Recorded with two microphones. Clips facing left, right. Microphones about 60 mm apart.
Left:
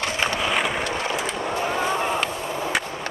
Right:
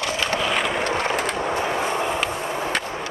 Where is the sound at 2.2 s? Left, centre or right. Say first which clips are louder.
Right 1 dB; centre.